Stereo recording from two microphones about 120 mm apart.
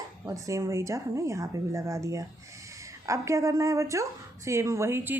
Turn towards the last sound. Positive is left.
turn(degrees=-20)  # may be behind; listen again after turning